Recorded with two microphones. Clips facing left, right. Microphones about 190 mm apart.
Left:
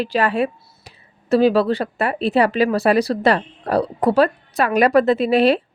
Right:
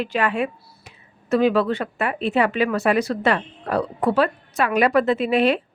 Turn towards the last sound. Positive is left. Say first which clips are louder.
# left 3 dB
turn(degrees=35)  # may be behind; listen again after turning